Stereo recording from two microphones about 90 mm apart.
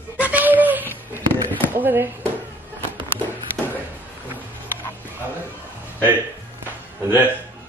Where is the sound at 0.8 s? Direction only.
20° left (ahead or behind).